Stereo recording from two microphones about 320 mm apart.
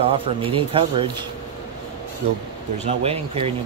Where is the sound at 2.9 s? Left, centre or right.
Centre.